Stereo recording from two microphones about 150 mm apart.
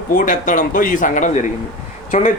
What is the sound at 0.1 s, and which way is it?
Speech, 60° left (ahead or behind).